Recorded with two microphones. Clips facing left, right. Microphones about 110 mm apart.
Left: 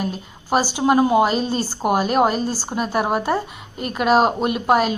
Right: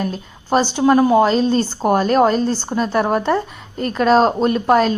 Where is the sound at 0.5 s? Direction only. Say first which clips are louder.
Right 3 dB; 10° left (ahead or behind).